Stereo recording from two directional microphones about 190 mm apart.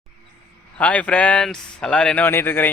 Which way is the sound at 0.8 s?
5° left (ahead or behind).